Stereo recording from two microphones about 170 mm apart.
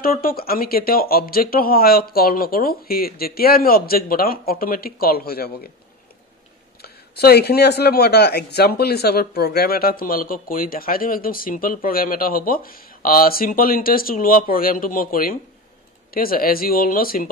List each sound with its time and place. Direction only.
0.0 s speech: 60° left (ahead or behind)
6.8 s speech: 70° left (ahead or behind)